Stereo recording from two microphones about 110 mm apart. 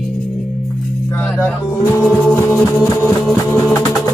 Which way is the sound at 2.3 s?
25° left (ahead or behind).